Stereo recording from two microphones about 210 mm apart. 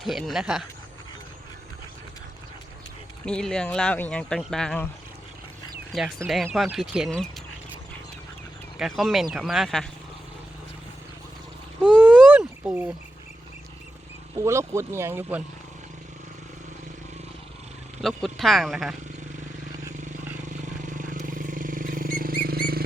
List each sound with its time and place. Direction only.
0.0 s speech: centre (ahead or behind)
3.2 s speech: 5° left (ahead or behind)
5.9 s speech: centre (ahead or behind)
8.8 s speech: centre (ahead or behind)
11.9 s a sound: 5° right (ahead or behind)
14.3 s speech: 15° right (ahead or behind)
18.0 s speech: centre (ahead or behind)
20.3 s vehicle: 35° right (ahead or behind)